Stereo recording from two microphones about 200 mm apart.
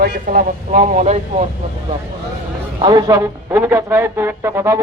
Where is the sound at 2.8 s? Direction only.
20° right (ahead or behind).